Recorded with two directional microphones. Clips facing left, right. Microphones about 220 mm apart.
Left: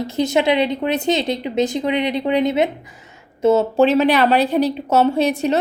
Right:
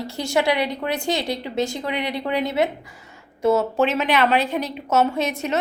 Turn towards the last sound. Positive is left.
turn(degrees=35)  # may be behind; listen again after turning